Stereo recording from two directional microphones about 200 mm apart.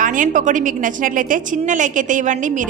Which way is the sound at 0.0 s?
40° right (ahead or behind).